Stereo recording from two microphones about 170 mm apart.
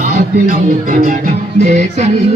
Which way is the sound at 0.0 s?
45° right (ahead or behind).